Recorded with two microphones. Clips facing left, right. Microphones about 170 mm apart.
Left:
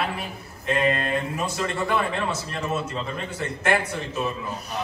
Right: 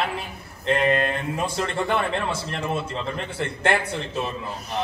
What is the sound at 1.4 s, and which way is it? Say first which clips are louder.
A man's voice: right 1 dB; 30° right (ahead or behind).